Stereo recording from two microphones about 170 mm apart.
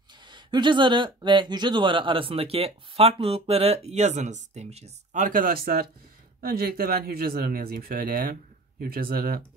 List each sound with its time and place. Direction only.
0.2 s speech: 25° right (ahead or behind); by 9.4 s 60° right (ahead or behind)